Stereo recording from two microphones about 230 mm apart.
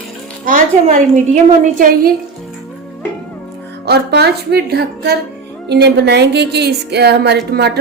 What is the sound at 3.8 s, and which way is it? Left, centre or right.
A woman's voice, right.